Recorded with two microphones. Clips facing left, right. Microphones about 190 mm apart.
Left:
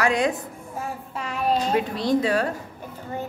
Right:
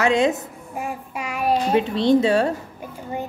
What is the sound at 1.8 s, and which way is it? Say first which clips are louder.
Speech: right 5 dB; 25° right (ahead or behind).